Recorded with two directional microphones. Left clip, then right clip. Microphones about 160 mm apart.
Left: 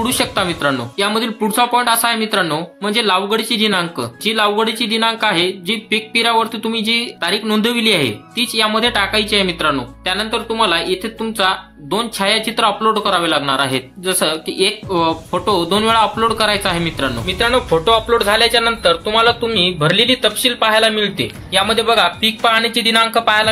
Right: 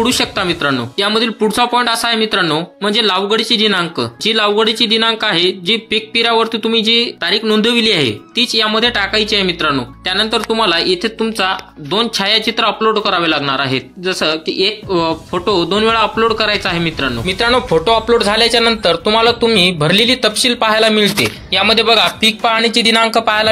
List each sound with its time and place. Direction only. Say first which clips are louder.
0.0 s speech: right 2 dB; 15° right (ahead or behind)
10.1 s speech: right 5 dB; 45° right (ahead or behind); by 17.1 s 15° right (ahead or behind)
17.3 s speech: right 2 dB; 55° right (ahead or behind)
21.5 s speech: right 2 dB; 20° right (ahead or behind)
22.2 s speech: right 2 dB; 40° right (ahead or behind)